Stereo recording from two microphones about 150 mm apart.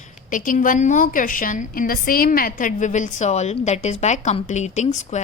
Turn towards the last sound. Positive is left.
turn(degrees=50)  # may be behind; listen again after turning